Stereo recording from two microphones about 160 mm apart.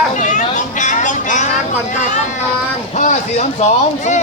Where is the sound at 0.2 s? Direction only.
50° left (ahead or behind).